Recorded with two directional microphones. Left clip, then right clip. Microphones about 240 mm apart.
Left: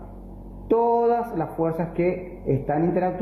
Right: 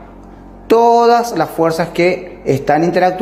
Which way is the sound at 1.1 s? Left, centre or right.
Right.